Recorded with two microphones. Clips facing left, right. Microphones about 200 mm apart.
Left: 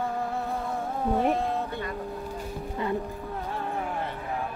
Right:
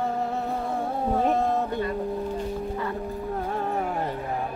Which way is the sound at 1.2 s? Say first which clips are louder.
Right 3 dB; 40° right (ahead or behind).